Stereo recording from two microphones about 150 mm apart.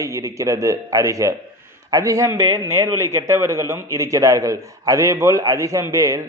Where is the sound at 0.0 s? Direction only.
20° right (ahead or behind).